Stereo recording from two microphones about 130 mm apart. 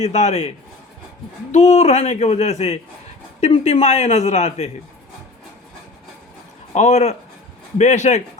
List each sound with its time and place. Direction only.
0.0 s speech: 55° left (ahead or behind)
1.5 s speech: 55° left (ahead or behind)
6.7 s speech: 60° left (ahead or behind)